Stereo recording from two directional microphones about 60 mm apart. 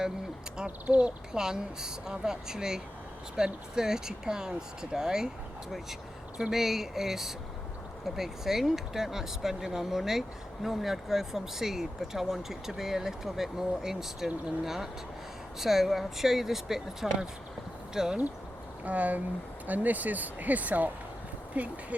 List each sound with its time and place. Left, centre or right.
0.5 s speech: centre
6.3 s speech: centre
18.9 s speech: right